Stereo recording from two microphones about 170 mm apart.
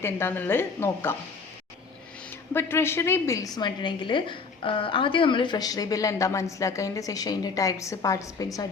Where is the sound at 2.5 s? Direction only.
15° left (ahead or behind).